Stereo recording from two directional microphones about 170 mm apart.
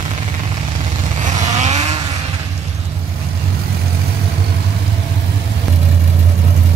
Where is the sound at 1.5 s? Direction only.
40° right (ahead or behind).